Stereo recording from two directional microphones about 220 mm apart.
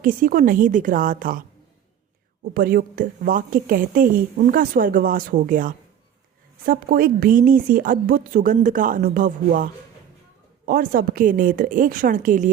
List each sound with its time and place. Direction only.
0.0 s a woman's voice: 40° right (ahead or behind)
2.5 s a woman's voice: 40° right (ahead or behind)
10.7 s a woman's voice: 40° right (ahead or behind)